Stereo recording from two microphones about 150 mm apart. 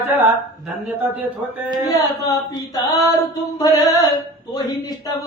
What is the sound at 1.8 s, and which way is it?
A man's voice, 20° left (ahead or behind).